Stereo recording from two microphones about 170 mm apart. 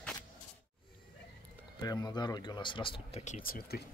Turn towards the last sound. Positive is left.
turn(degrees=60)  # may be behind; listen again after turning